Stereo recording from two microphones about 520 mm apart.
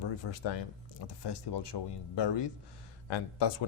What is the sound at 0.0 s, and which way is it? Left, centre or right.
Speech, left.